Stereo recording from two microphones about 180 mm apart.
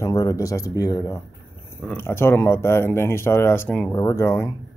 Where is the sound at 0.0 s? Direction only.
20° left (ahead or behind).